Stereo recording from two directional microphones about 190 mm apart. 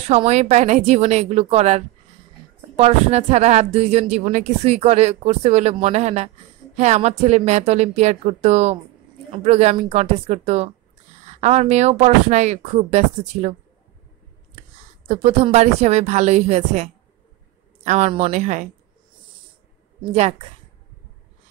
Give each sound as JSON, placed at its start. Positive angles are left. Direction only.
{"t": 0.1, "sound": "a woman's voice", "side_deg": -35}
{"t": 15.0, "sound": "a woman's voice", "side_deg": -35}